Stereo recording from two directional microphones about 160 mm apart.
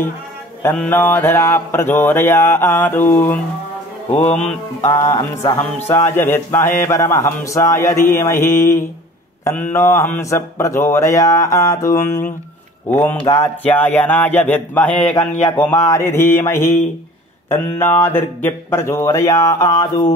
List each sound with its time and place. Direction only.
0.6 s speech: 15° left (ahead or behind)
4.1 s music: 40° left (ahead or behind)
4.8 s speech: 20° left (ahead or behind)
9.4 s speech: 15° left (ahead or behind)